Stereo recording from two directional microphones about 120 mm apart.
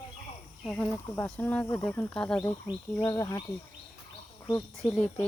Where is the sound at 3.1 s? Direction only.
25° left (ahead or behind).